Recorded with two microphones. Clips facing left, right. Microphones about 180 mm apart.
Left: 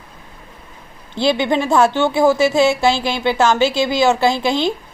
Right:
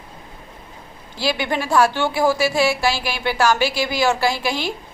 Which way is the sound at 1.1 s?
25° left (ahead or behind).